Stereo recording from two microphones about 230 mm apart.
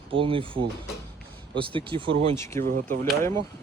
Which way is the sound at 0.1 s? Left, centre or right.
Right.